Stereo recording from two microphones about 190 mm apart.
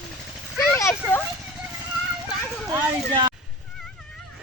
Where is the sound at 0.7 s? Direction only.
15° left (ahead or behind).